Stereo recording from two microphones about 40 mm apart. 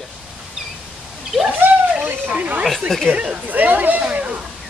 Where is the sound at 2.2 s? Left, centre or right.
Right.